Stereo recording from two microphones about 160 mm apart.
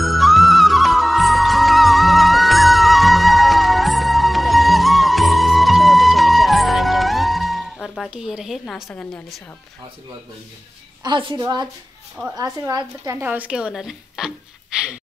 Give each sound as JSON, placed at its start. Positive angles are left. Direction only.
{"t": 0.0, "sound": "music", "side_deg": 0}
{"t": 11.1, "sound": "a woman's voice", "side_deg": -30}